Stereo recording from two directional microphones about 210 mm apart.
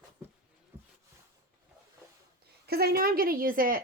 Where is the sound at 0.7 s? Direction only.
10° right (ahead or behind).